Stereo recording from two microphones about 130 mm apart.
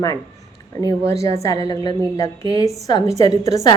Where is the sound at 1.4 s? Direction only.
25° left (ahead or behind).